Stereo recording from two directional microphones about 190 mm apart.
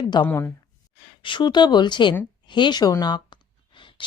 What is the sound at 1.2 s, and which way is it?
A woman's voice, 25° left (ahead or behind).